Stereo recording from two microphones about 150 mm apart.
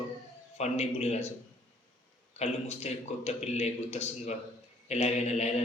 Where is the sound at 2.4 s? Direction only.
45° left (ahead or behind).